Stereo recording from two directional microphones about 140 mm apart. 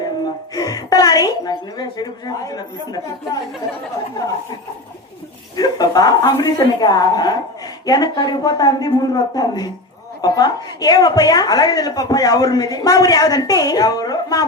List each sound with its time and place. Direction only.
0.5 s a woman's voice: 25° left (ahead or behind)
5.5 s a woman's voice: 30° left (ahead or behind)